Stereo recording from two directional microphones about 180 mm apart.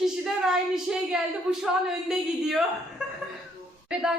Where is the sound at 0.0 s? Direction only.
Centre (ahead or behind).